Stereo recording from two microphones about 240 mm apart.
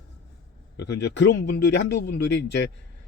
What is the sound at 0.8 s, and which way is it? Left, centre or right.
Speech, left.